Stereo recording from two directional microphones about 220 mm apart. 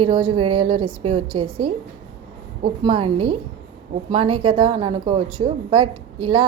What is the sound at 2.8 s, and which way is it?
A woman's voice, 25° right (ahead or behind).